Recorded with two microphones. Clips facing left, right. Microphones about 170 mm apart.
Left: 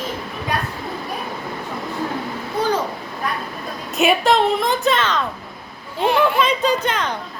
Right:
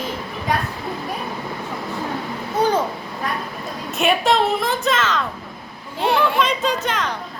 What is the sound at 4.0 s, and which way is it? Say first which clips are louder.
A woman's voice: left 2 dB; centre (ahead or behind).